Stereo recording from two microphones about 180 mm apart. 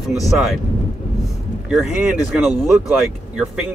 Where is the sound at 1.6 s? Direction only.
Centre (ahead or behind).